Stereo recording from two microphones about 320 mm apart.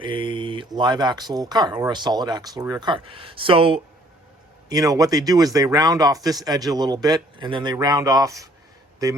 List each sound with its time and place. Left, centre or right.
0.0 s speech: centre